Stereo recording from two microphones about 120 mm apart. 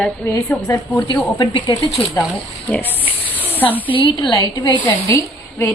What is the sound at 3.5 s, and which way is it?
Spray, 15° left (ahead or behind).